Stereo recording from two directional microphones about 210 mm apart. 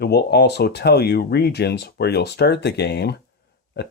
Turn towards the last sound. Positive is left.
turn(degrees=50)  # may be behind; listen again after turning